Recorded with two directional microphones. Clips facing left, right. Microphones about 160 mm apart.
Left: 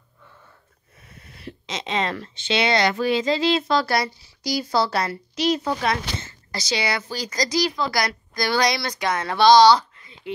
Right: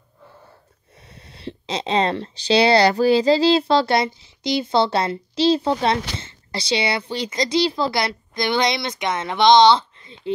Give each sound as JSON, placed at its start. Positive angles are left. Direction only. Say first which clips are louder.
{"t": 0.2, "sound": "speech", "louder": "right 5 dB", "side_deg": -35}